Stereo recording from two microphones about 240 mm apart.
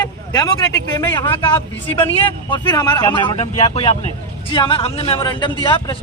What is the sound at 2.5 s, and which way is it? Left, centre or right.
Speech, centre.